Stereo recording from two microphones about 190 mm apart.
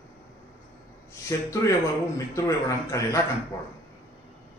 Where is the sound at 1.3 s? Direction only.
15° left (ahead or behind).